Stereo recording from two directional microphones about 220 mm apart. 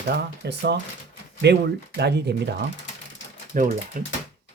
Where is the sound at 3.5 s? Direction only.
40° right (ahead or behind).